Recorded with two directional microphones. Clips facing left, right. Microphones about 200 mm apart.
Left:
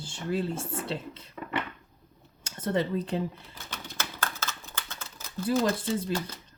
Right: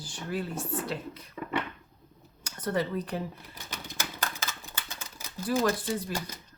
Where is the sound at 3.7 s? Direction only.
15° right (ahead or behind).